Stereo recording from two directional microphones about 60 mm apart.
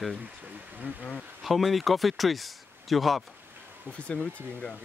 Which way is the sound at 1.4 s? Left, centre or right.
Centre.